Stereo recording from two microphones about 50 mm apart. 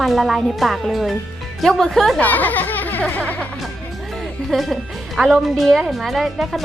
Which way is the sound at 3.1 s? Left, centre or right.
Left.